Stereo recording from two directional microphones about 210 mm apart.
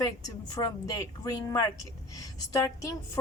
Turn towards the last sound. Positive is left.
turn(degrees=15)  # may be behind; listen again after turning